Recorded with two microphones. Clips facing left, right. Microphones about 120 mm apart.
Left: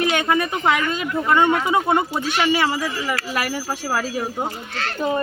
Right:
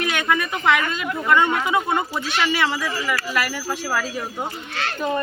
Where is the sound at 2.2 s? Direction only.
40° left (ahead or behind).